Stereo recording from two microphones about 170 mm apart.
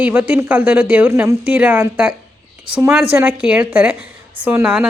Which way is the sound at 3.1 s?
5° right (ahead or behind).